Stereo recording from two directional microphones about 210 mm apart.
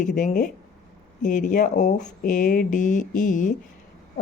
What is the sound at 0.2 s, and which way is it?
Speech, 35° left (ahead or behind).